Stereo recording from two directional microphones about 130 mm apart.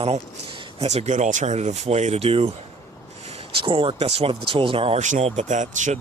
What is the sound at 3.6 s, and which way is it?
Speech, 40° right (ahead or behind).